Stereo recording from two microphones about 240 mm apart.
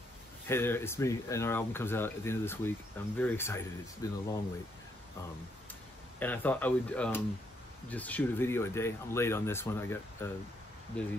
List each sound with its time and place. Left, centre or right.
0.5 s speech: centre
6.1 s speech: centre